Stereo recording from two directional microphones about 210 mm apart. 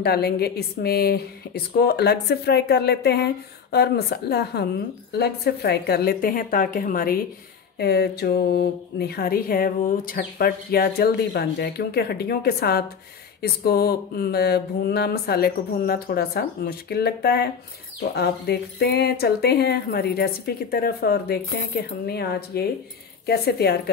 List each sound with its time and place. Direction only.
0.0 s speech: 50° left (ahead or behind)